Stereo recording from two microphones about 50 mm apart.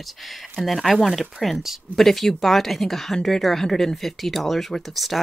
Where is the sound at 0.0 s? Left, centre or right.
Centre.